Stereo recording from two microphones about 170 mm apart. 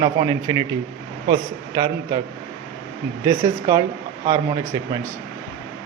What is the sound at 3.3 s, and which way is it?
A man's voice, 20° right (ahead or behind).